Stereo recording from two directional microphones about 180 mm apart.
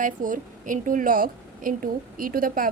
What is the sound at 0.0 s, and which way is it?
A woman's voice, 45° right (ahead or behind).